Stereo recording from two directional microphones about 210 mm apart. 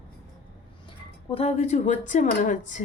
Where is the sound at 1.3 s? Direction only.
30° left (ahead or behind).